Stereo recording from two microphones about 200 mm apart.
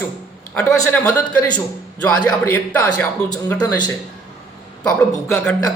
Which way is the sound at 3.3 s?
20° left (ahead or behind).